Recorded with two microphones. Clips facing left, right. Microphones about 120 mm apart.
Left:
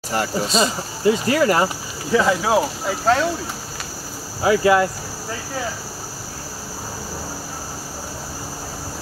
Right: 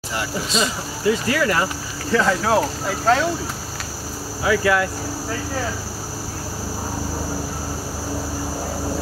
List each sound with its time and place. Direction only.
0.1 s speech: 40° left (ahead or behind)
2.0 s speech: 5° left (ahead or behind)
4.4 s speech: 25° left (ahead or behind)